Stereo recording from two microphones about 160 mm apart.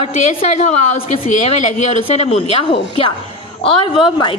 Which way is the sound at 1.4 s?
40° left (ahead or behind).